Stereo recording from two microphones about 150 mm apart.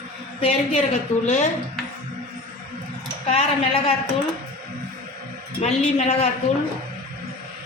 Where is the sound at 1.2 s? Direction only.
50° left (ahead or behind).